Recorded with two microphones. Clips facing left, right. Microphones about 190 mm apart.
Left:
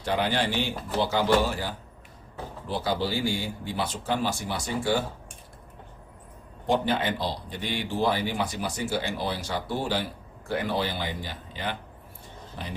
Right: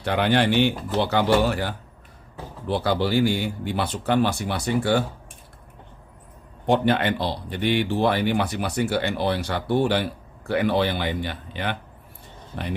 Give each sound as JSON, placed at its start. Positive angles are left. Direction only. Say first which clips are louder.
{"t": 0.0, "sound": "speech", "louder": "right 5 dB", "side_deg": -65}
{"t": 6.7, "sound": "speech", "louder": "right 5 dB", "side_deg": -65}